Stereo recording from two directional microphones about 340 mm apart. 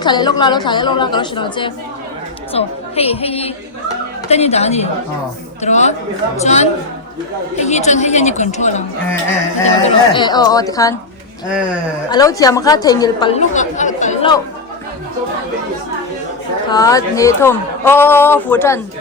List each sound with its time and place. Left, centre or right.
0.0 s a woman's voice: centre
9.8 s a woman's voice: centre
12.1 s a woman's voice: centre
16.6 s a woman's voice: centre